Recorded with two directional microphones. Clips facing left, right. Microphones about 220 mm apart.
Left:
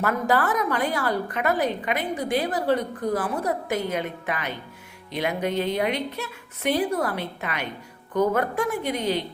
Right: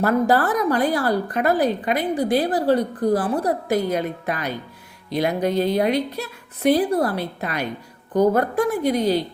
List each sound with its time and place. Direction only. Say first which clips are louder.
0.0 s a woman's voice: right 5 dB; 35° right (ahead or behind)